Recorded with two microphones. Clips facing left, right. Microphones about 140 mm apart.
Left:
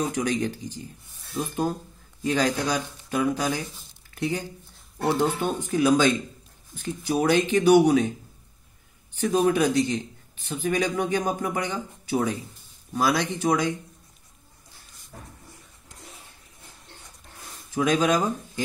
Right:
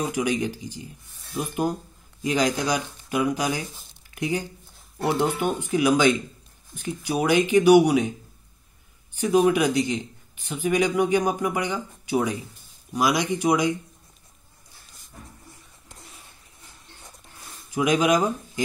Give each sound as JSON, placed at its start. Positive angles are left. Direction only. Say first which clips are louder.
{"t": 0.0, "sound": "speech", "louder": "right 1 dB", "side_deg": -10}
{"t": 9.2, "sound": "speech", "louder": "right 2 dB", "side_deg": -10}
{"t": 15.1, "sound": "a sound", "louder": "left 1 dB", "side_deg": 60}
{"t": 17.6, "sound": "speech", "louder": "right 1 dB", "side_deg": -15}